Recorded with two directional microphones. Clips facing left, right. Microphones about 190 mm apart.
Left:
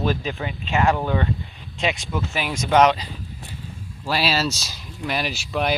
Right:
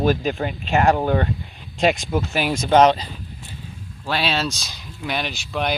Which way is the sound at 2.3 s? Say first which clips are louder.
Right 5 dB; centre (ahead or behind).